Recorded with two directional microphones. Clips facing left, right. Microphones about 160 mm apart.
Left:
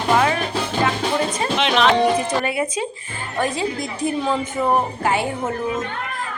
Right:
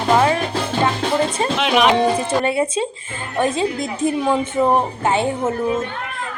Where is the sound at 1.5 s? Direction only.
5° right (ahead or behind).